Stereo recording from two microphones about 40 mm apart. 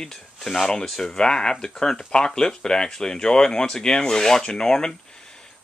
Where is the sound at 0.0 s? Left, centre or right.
Centre.